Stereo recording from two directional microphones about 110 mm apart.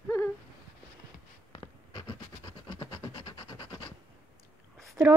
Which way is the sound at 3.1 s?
50° left (ahead or behind).